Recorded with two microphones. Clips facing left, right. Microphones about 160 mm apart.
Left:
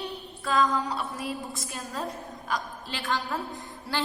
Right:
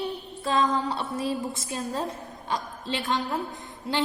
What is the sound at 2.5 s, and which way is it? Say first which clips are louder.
Speech: right 3 dB; 25° right (ahead or behind).